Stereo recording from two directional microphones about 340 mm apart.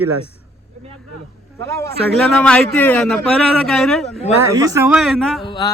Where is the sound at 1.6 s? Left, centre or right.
Centre.